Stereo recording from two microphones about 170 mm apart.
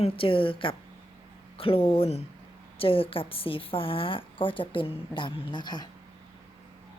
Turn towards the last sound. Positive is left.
turn(degrees=25)  # may be behind; listen again after turning